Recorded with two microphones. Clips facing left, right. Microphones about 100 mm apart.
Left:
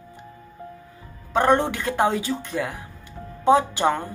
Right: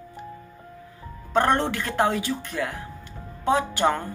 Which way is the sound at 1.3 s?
10° left (ahead or behind).